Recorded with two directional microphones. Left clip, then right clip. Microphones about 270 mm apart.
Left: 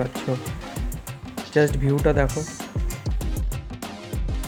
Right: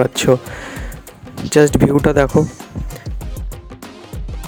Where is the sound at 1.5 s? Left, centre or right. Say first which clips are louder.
Right 9 dB; right.